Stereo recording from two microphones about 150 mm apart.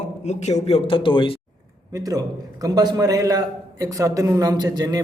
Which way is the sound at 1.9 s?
25° right (ahead or behind).